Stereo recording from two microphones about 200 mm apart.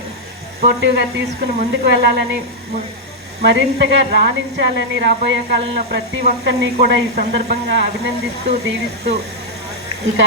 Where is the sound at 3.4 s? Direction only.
60° right (ahead or behind).